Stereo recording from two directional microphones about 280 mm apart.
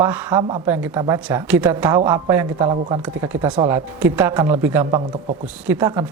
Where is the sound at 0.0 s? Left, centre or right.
Centre.